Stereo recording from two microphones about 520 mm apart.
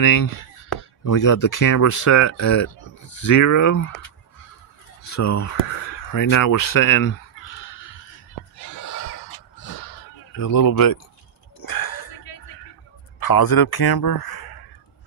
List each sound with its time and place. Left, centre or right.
0.0 s speech: left
5.0 s speech: left
7.6 s a sound: left
13.2 s a man's voice: left